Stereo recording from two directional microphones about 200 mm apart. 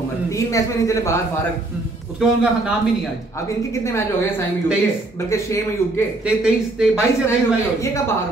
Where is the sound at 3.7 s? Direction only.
15° left (ahead or behind).